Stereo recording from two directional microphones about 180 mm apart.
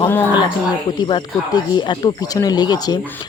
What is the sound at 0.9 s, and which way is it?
Speech, 25° left (ahead or behind).